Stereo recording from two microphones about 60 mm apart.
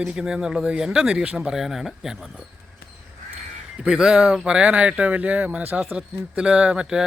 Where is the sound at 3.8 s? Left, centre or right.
Centre.